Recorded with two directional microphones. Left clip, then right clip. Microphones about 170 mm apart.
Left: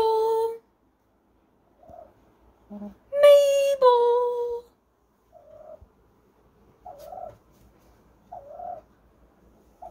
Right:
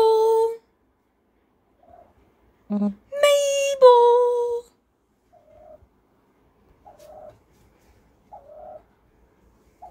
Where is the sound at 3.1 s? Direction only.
25° right (ahead or behind).